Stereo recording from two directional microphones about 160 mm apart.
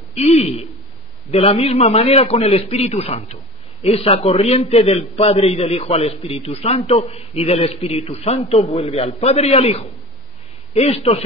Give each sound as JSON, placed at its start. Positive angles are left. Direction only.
{"t": 0.1, "sound": "a man's voice", "side_deg": 40}